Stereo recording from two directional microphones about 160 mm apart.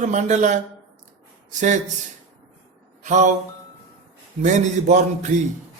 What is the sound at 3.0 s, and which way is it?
Mantra, 50° right (ahead or behind).